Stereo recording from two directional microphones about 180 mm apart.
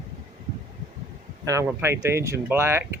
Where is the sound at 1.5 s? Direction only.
15° right (ahead or behind).